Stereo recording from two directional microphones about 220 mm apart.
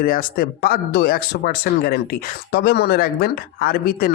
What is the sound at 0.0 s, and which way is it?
A man's voice, 40° left (ahead or behind).